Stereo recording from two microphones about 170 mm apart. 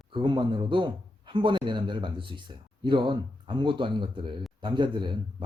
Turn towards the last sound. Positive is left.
turn(degrees=-25)  # may be behind; listen again after turning